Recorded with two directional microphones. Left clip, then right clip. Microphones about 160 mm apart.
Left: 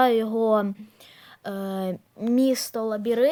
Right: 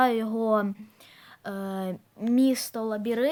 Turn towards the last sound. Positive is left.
turn(degrees=40)  # may be behind; listen again after turning